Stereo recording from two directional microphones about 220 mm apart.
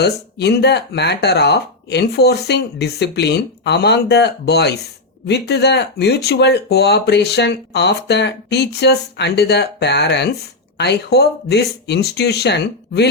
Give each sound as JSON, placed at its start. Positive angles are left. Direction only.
{"t": 0.0, "sound": "speech", "side_deg": 50}